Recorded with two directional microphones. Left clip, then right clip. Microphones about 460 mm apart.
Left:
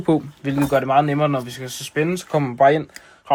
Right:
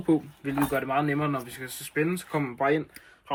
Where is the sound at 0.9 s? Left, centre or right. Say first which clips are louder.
Left 11 dB; left.